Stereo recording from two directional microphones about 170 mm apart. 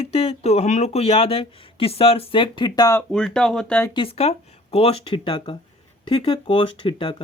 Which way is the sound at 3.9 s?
35° left (ahead or behind).